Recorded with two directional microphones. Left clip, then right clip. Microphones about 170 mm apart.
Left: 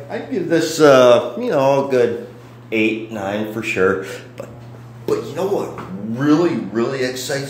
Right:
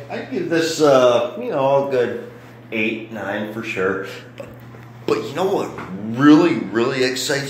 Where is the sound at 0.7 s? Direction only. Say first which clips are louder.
Left 4 dB; 35° left (ahead or behind).